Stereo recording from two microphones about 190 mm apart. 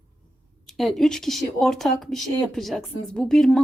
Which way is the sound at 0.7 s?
Centre (ahead or behind).